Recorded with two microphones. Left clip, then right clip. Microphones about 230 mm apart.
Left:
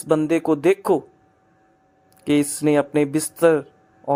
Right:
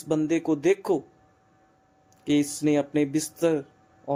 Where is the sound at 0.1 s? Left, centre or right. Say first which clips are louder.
Left 6 dB; centre.